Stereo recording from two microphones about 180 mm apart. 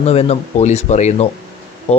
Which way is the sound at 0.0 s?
35° left (ahead or behind).